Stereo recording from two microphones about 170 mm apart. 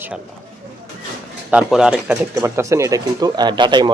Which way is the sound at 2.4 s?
15° right (ahead or behind).